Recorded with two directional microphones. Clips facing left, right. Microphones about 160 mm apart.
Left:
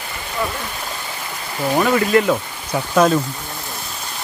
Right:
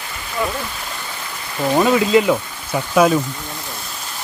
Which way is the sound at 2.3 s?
5° right (ahead or behind).